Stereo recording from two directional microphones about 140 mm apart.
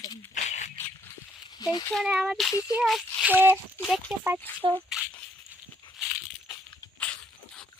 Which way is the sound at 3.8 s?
5° right (ahead or behind).